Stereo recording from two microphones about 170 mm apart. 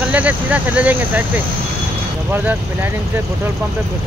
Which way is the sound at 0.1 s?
10° right (ahead or behind).